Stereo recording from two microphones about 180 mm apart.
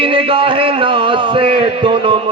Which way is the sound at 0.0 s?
30° right (ahead or behind).